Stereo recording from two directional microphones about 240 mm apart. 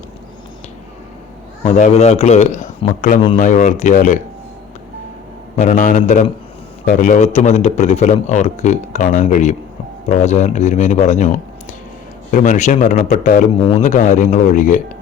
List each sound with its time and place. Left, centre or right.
1.6 s a man's voice: left
3.2 s a man's voice: left
5.5 s a man's voice: left